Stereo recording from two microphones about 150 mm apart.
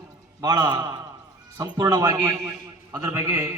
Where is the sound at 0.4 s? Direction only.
30° right (ahead or behind).